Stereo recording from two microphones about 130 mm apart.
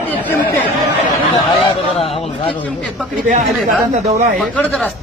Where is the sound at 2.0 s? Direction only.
50° left (ahead or behind).